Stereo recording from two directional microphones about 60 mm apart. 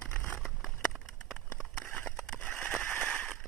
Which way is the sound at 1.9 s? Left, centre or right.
Left.